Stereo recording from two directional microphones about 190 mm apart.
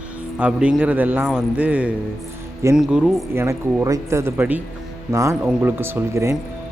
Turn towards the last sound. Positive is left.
turn(degrees=-15)  # may be behind; listen again after turning